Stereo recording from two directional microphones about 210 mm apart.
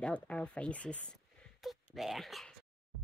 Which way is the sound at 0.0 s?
5° left (ahead or behind).